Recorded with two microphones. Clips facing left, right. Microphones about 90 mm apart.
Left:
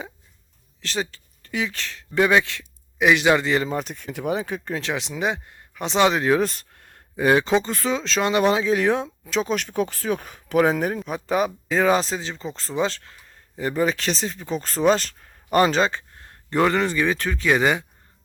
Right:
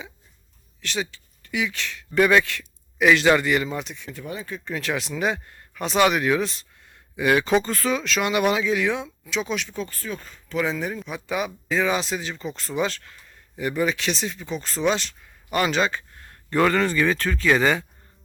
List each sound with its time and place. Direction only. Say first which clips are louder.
0.8 s speech: left 1 dB; 35° left (ahead or behind)
2.1 s a man's voice: even; 20° left (ahead or behind); by 4.1 s 45° left (ahead or behind)
4.1 s speech: left 9 dB; 75° left (ahead or behind)
4.7 s a man's voice: right 3 dB; 25° left (ahead or behind)
6.4 s a sound: left 4 dB; 50° left (ahead or behind)
7.2 s speech: left 1 dB; 30° left (ahead or behind); by 9.8 s 45° left (ahead or behind)
9.8 s speech: left 7 dB; 75° left (ahead or behind); by 17.8 s 15° left (ahead or behind)